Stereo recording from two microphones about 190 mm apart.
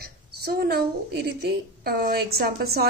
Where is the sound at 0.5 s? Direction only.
55° right (ahead or behind).